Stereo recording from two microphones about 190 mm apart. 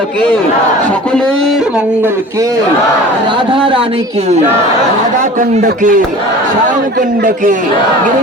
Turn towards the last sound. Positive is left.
turn(degrees=-45)  # may be behind; listen again after turning